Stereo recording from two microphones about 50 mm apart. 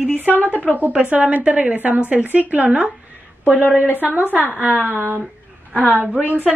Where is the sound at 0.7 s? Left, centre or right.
Right.